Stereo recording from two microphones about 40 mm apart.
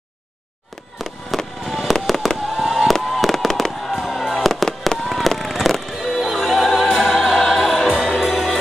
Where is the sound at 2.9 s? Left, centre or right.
Centre.